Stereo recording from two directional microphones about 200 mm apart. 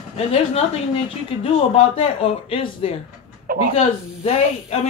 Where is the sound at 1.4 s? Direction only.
30° left (ahead or behind).